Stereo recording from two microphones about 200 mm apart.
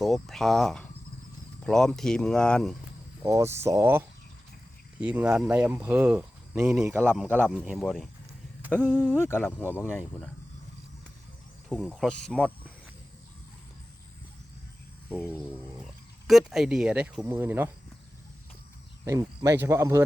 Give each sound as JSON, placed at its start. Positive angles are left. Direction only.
{"t": 0.0, "sound": "speech", "side_deg": 0}
{"t": 3.2, "sound": "speech", "side_deg": -15}
{"t": 9.0, "sound": "speech", "side_deg": 10}
{"t": 11.7, "sound": "speech", "side_deg": 5}
{"t": 15.3, "sound": "speech", "side_deg": 0}
{"t": 19.0, "sound": "speech", "side_deg": -15}